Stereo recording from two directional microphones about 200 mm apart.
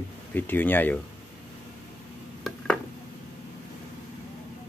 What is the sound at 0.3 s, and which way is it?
Speech, 10° left (ahead or behind).